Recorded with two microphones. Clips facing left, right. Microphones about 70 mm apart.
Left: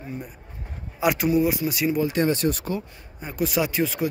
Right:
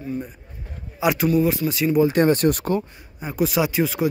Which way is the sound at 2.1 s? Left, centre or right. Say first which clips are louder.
Right 5 dB; right.